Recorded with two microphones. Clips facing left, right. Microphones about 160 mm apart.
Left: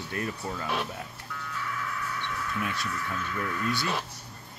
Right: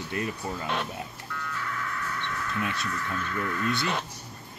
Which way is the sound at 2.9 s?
5° left (ahead or behind).